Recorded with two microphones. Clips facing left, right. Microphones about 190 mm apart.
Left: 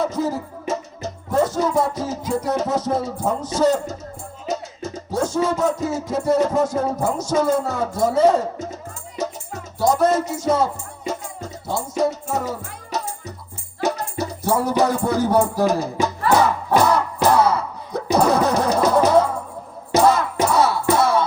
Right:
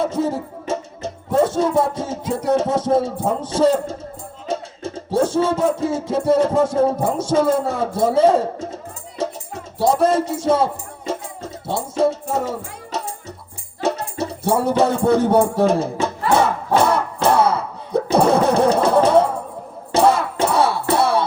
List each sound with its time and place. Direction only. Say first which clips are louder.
0.0 s music: right 2 dB; 30° right (ahead or behind)
19.9 s battle cry: even; 30° right (ahead or behind)
20.4 s music: even; 30° right (ahead or behind)